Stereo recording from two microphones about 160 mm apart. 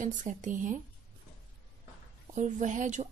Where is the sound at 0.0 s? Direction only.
50° right (ahead or behind).